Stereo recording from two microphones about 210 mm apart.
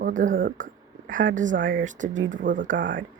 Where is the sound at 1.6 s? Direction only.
60° right (ahead or behind).